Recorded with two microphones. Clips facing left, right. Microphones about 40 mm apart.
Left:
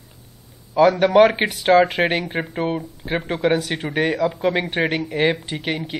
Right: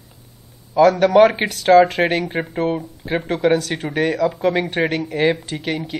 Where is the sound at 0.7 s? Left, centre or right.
Centre.